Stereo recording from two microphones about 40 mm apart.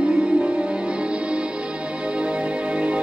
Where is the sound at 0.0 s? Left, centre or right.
Right.